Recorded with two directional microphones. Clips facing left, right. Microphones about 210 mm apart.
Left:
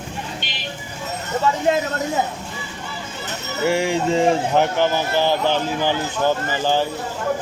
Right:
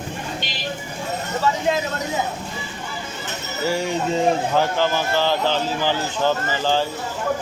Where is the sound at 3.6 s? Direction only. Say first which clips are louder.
Left 3 dB; 85° left.